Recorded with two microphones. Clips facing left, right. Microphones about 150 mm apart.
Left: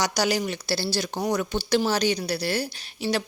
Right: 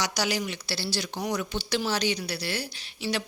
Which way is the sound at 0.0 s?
45° left (ahead or behind).